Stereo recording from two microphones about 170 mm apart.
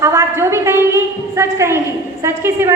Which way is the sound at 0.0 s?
15° right (ahead or behind).